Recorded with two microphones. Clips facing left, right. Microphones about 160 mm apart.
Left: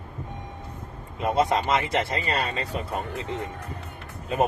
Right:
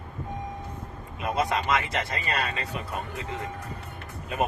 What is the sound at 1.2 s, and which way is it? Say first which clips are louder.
Speech: left 4 dB; 30° left (ahead or behind).